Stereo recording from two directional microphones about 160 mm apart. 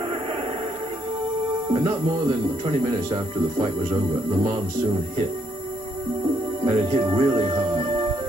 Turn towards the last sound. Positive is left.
turn(degrees=-30)  # may be behind; listen again after turning